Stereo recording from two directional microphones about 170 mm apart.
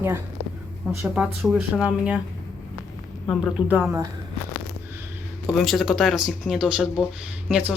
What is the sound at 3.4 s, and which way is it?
Speech, 10° right (ahead or behind).